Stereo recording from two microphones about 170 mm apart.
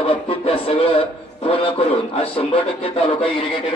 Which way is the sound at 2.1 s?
35° left (ahead or behind).